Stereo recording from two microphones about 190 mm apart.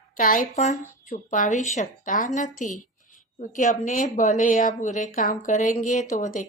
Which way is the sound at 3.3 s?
40° left (ahead or behind).